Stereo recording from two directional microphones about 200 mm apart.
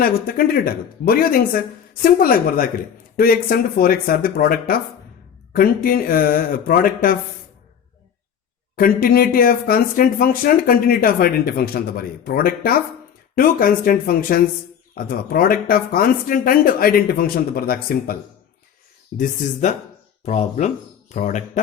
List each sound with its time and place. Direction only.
0.0 s speech: 45° left (ahead or behind)
8.7 s speech: 45° left (ahead or behind)